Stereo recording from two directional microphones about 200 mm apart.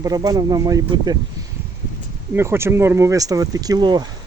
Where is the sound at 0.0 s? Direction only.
20° right (ahead or behind).